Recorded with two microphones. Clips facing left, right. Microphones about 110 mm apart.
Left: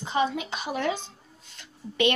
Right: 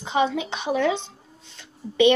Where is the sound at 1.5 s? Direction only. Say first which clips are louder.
Right 7 dB; 20° right (ahead or behind).